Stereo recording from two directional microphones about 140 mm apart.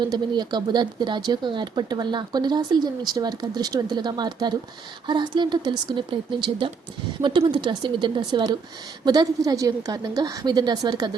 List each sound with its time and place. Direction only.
0.0 s a woman's voice: 30° right (ahead or behind)